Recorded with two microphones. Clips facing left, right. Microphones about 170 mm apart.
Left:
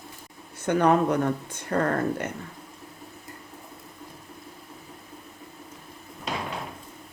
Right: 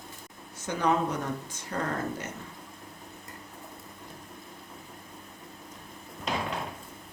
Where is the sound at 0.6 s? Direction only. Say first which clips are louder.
Left 6 dB; 60° left (ahead or behind).